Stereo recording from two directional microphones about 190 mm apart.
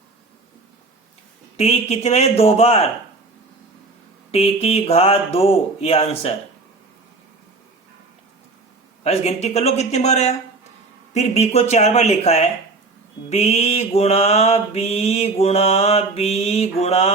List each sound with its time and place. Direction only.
1.5 s mantra: 35° left (ahead or behind)
4.3 s mantra: 30° left (ahead or behind)
9.0 s mantra: 35° left (ahead or behind)